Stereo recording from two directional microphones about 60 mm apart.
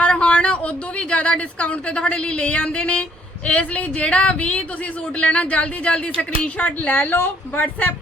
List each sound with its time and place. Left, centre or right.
0.0 s speech: centre